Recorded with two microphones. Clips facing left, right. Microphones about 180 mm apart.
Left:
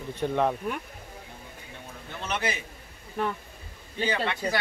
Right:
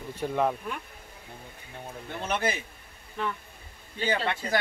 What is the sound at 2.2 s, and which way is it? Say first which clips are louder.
Speech: right 2 dB; 55° right (ahead or behind).